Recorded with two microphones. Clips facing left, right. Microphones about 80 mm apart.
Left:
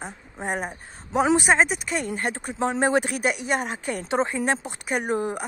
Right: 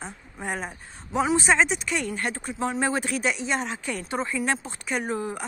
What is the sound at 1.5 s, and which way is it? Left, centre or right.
Speech, left.